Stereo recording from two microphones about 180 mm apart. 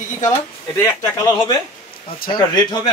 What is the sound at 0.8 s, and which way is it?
Speech, 15° left (ahead or behind).